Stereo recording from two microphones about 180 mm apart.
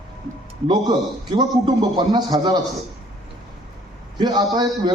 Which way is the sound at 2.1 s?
25° right (ahead or behind).